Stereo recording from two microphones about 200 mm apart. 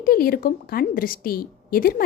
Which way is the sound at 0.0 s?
45° left (ahead or behind).